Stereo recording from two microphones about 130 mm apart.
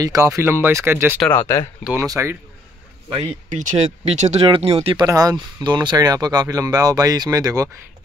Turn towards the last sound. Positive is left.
turn(degrees=-25)  # may be behind; listen again after turning